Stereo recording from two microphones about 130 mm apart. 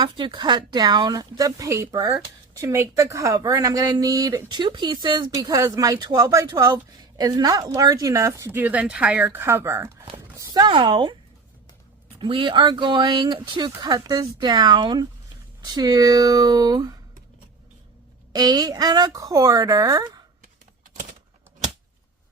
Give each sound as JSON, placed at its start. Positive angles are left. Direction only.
{"t": 0.0, "sound": "speech", "side_deg": -35}
{"t": 12.2, "sound": "speech", "side_deg": -40}
{"t": 18.3, "sound": "speech", "side_deg": -30}